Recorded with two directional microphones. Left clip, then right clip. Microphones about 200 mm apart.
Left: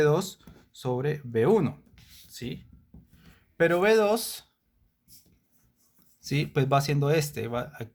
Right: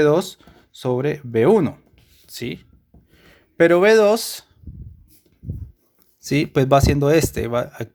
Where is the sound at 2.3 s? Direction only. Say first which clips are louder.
Right 9 dB; 45° right (ahead or behind).